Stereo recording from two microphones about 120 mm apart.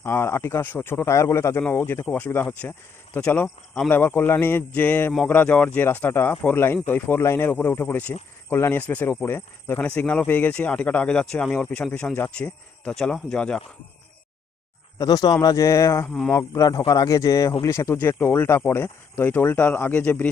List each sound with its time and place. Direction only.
0.0 s speech: 20° left (ahead or behind)
3.8 s speech: 15° left (ahead or behind)
14.9 s speech: 30° left (ahead or behind); by 20.2 s 10° left (ahead or behind)